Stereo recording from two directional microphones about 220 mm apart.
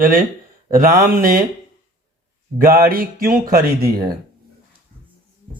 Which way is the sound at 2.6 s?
40° right (ahead or behind).